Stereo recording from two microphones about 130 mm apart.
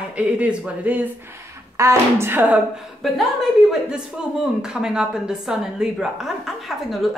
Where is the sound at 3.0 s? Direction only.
Centre (ahead or behind).